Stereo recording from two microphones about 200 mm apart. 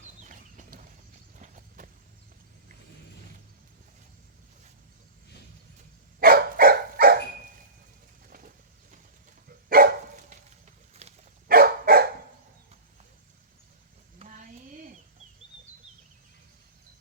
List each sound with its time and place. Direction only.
0.0 s a sound: 40° right (ahead or behind)
1.4 s clip-clop: 40° right (ahead or behind)
6.1 s dog: 50° right (ahead or behind)
8.3 s bird: 45° right (ahead or behind)
9.6 s dog: 45° right (ahead or behind); by 11.2 s 30° right (ahead or behind)
11.4 s dog: 45° right (ahead or behind)
14.2 s a sound: 40° right (ahead or behind)